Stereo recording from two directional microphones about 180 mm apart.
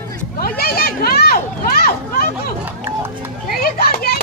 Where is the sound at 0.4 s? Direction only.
55° left (ahead or behind).